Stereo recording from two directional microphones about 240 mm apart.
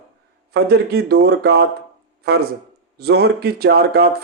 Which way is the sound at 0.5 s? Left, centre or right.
Right.